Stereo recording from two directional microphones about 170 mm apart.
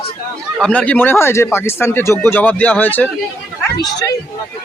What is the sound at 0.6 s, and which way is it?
Speech, 5° left (ahead or behind).